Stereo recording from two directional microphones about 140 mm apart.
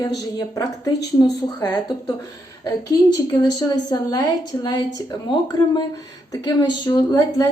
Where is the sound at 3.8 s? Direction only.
25° left (ahead or behind).